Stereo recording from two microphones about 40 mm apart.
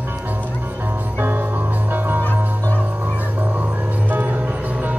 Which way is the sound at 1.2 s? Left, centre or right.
Right.